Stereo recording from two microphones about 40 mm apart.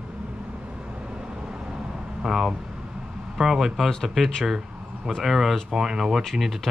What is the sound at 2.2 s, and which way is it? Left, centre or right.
Speech, centre.